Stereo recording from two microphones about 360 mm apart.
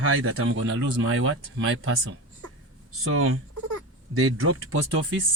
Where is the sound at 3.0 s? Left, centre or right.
Right.